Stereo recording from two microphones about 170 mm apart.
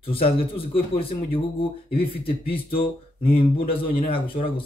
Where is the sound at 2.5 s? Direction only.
35° left (ahead or behind).